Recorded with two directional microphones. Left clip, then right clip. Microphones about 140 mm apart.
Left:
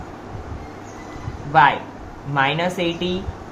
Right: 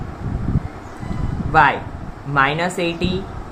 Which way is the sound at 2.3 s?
45° right (ahead or behind).